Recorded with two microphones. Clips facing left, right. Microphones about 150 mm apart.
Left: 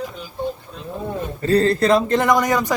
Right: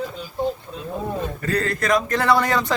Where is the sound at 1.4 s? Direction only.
30° left (ahead or behind).